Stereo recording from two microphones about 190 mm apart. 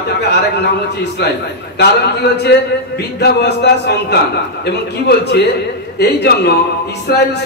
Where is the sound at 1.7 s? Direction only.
60° left (ahead or behind).